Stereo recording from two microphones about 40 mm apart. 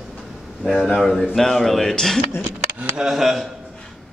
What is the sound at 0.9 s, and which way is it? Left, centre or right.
A man's voice, centre.